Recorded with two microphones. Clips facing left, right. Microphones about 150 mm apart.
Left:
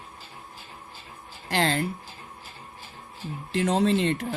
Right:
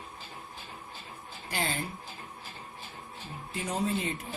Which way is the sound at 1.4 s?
90° left.